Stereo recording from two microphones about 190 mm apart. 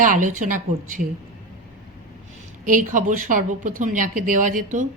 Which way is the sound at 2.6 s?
45° right (ahead or behind).